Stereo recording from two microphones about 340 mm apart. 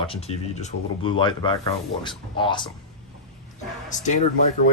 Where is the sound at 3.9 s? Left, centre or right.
Left.